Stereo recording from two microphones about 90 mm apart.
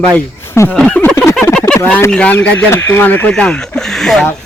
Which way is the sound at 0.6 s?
30° left (ahead or behind).